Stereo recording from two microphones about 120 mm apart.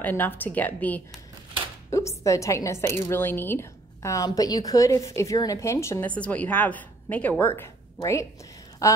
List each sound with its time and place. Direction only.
0.0 s a woman's voice: 15° left (ahead or behind)
6.0 s a woman's voice: 10° left (ahead or behind); by 9.0 s 25° left (ahead or behind)